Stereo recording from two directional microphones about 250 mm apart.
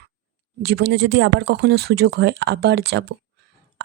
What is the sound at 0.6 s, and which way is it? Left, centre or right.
A woman's voice, right.